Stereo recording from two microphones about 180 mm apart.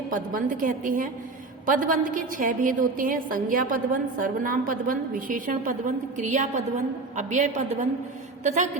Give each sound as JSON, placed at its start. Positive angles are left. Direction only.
{"t": 0.1, "sound": "a woman's voice", "side_deg": -50}